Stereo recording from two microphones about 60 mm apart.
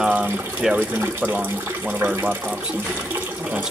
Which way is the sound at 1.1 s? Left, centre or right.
Right.